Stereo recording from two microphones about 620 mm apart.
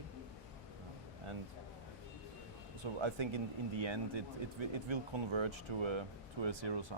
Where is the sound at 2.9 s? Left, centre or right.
Right.